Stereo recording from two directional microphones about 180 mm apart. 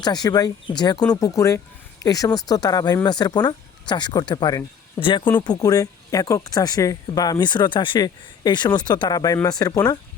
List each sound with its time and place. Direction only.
0.0 s speech: 20° left (ahead or behind)